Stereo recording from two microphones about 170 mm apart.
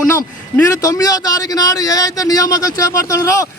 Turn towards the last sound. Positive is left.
turn(degrees=20)  # may be behind; listen again after turning